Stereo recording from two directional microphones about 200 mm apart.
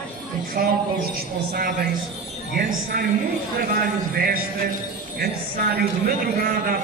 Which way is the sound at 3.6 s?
45° right (ahead or behind).